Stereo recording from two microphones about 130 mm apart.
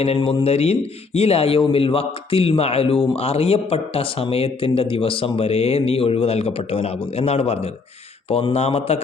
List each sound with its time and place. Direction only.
0.2 s speech: 35° left (ahead or behind)
0.4 s speech: 55° left (ahead or behind)